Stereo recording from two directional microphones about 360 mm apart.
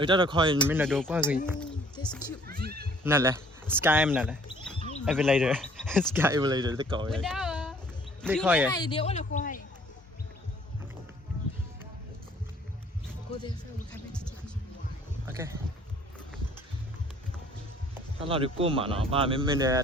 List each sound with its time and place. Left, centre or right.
0.0 s speech: centre
0.7 s speech: centre
1.5 s a sound: centre
2.5 s speech: right
3.0 s speech: centre
7.1 s a sound: centre
8.2 s speech: centre
8.7 s speech: centre
14.1 s a sound: centre
15.3 s speech: centre
17.9 s speech: centre